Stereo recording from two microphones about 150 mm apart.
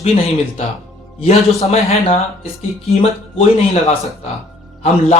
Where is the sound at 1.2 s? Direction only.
45° left (ahead or behind).